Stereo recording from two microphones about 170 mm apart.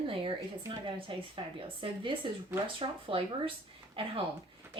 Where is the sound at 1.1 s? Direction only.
30° right (ahead or behind).